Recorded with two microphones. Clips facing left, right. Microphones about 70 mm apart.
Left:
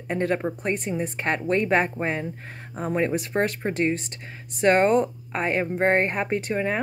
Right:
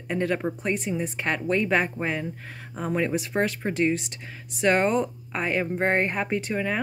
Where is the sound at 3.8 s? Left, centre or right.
Left.